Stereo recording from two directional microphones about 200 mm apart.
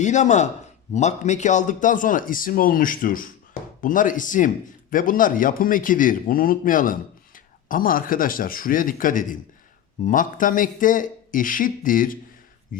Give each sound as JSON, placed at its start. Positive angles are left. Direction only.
{"t": 0.0, "sound": "a man's voice", "side_deg": 35}